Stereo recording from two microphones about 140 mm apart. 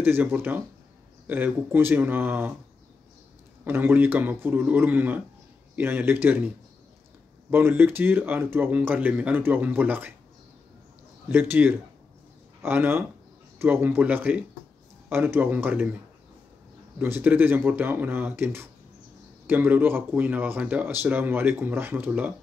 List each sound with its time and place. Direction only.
0.0 s speech: 15° right (ahead or behind)
3.6 s speech: 15° right (ahead or behind)
7.5 s speech: 15° right (ahead or behind)
11.2 s speech: 15° right (ahead or behind)
17.0 s speech: 15° right (ahead or behind)